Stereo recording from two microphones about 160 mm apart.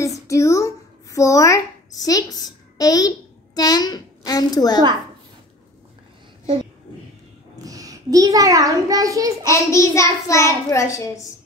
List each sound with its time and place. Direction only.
0.3 s a sound: 20° left (ahead or behind)
7.5 s a child's voice: 20° right (ahead or behind)
9.5 s a child's voice: 20° left (ahead or behind)